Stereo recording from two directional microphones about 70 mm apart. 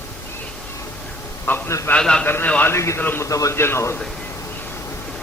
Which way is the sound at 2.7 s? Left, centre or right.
Left.